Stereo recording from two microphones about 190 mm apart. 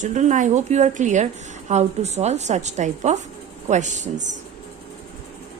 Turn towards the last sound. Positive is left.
turn(degrees=-40)  # may be behind; listen again after turning